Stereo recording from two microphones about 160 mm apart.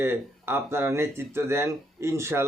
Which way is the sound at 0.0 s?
15° right (ahead or behind).